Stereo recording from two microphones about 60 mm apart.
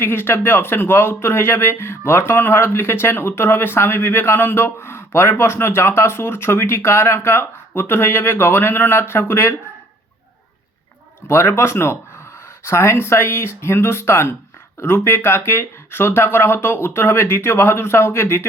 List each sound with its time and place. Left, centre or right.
0.0 s speech: left
11.3 s speech: left